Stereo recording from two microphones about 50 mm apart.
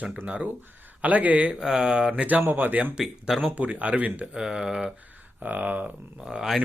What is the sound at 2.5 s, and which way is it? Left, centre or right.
Speech, right.